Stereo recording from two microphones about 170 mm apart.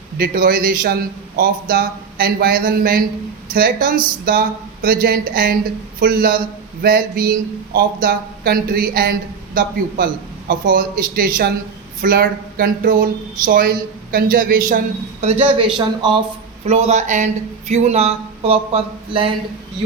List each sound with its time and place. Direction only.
0.2 s speech: 60° right (ahead or behind)
10.5 s speech: 55° right (ahead or behind)
15.2 s speech: 35° right (ahead or behind)
16.0 s speech: 25° right (ahead or behind)
16.6 s speech: 40° right (ahead or behind)